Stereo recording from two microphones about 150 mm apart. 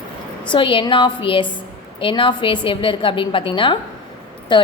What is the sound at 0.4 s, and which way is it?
A woman's voice, 35° left (ahead or behind).